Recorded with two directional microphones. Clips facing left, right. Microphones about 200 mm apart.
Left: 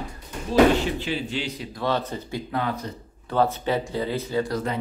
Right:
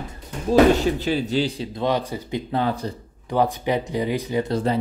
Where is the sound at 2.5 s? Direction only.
30° right (ahead or behind).